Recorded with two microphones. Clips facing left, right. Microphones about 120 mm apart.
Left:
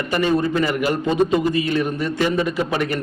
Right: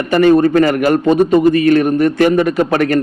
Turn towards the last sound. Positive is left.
turn(degrees=-60)  # may be behind; listen again after turning